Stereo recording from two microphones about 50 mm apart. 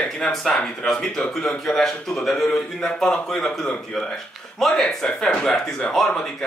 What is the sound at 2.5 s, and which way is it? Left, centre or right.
Speech, centre.